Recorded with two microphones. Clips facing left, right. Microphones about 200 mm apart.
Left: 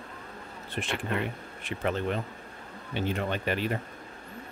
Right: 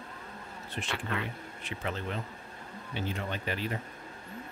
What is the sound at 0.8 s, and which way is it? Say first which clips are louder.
Speech: left 4 dB; 60° left (ahead or behind).